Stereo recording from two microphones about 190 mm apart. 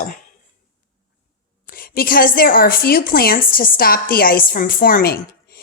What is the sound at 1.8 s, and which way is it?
A woman's voice, 50° left (ahead or behind).